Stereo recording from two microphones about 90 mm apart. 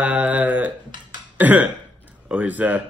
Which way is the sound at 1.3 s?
20° right (ahead or behind).